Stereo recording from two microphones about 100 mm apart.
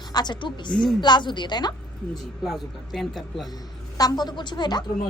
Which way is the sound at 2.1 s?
5° left (ahead or behind).